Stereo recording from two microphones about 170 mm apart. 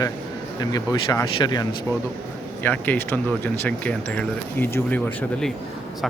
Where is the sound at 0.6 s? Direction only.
20° left (ahead or behind).